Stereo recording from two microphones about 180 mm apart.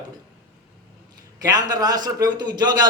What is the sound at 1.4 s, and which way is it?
A man's voice, 20° right (ahead or behind).